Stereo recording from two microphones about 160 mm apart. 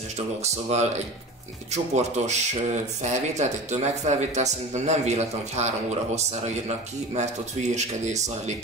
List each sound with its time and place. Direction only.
0.4 s speech: 45° right (ahead or behind)
7.7 s speech: 45° right (ahead or behind)